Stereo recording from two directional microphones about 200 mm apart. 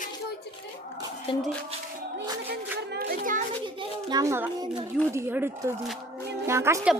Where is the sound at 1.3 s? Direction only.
25° left (ahead or behind).